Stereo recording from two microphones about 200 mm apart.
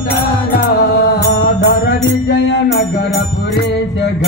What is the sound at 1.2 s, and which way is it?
Music, 65° left (ahead or behind).